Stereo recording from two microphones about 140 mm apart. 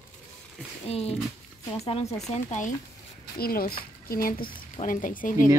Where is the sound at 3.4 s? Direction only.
90° left.